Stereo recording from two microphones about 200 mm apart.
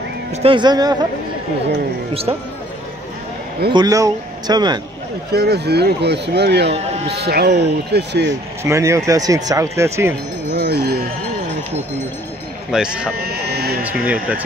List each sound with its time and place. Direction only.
0.4 s speech: 25° right (ahead or behind)
3.7 s speech: 20° right (ahead or behind)
5.3 s speech: 55° right (ahead or behind)
6.7 s speech: 30° right (ahead or behind)
7.1 s speech: 55° right (ahead or behind)
8.6 s speech: 15° right (ahead or behind)
10.5 s sheep: 55° right (ahead or behind)
12.7 s speech: 5° right (ahead or behind)
13.2 s a sound: 50° right (ahead or behind)
13.9 s speech: 5° right (ahead or behind)